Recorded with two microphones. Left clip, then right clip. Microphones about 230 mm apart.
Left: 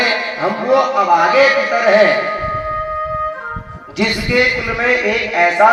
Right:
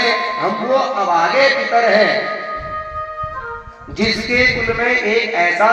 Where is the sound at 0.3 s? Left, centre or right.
Left.